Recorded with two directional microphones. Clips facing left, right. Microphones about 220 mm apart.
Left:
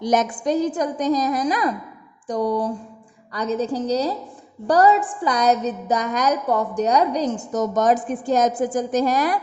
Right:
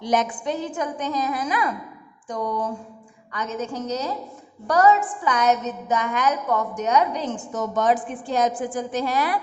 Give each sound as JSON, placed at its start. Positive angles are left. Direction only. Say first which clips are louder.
{"t": 0.0, "sound": "a woman's voice", "louder": "left 3 dB", "side_deg": 40}